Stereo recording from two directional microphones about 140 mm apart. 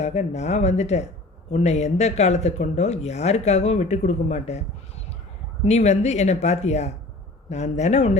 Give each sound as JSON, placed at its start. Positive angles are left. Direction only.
{"t": 0.0, "sound": "speech", "side_deg": 55}
{"t": 5.6, "sound": "speech", "side_deg": 55}